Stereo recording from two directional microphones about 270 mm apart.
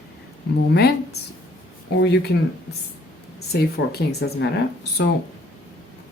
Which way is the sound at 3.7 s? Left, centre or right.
Left.